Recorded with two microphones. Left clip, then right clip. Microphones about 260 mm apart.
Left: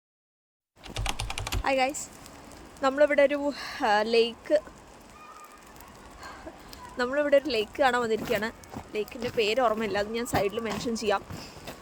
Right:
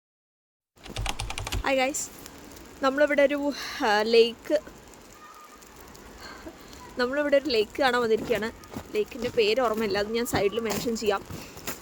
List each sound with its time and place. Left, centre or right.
0.9 s typing: centre
2.8 s speech: centre
6.9 s speech: centre